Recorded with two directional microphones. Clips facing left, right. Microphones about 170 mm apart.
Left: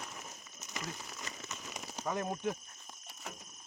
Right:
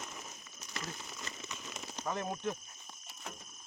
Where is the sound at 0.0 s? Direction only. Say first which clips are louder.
Even; centre (ahead or behind).